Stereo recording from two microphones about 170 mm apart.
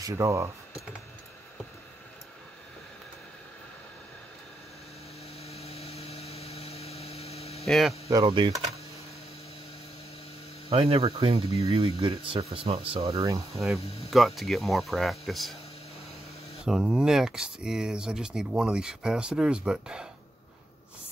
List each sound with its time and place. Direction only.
0.0 s speech: 20° right (ahead or behind)
5.4 s vehicle: 35° left (ahead or behind)
7.6 s speech: centre (ahead or behind)
8.1 s speech: 25° right (ahead or behind)
10.7 s speech: 35° right (ahead or behind)
14.1 s speech: centre (ahead or behind)
16.6 s speech: 5° right (ahead or behind)